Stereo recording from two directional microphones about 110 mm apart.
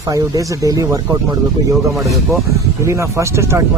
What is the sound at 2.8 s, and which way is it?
Speech, 25° right (ahead or behind).